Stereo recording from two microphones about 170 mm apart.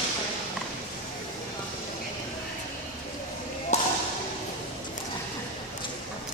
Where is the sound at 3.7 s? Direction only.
40° left (ahead or behind).